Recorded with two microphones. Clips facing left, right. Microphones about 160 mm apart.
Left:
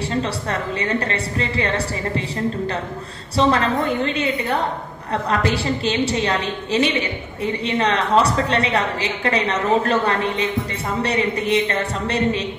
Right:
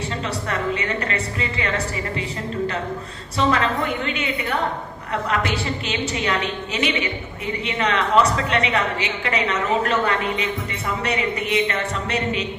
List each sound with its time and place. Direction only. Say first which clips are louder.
0.2 s a woman's voice: left 1 dB; 30° left (ahead or behind)
3.3 s a woman's voice: left 3 dB; 35° left (ahead or behind)